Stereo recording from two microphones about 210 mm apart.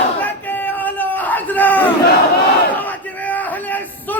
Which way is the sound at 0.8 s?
10° left (ahead or behind).